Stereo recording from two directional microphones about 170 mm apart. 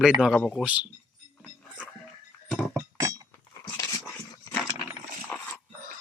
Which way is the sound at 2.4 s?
5° left (ahead or behind).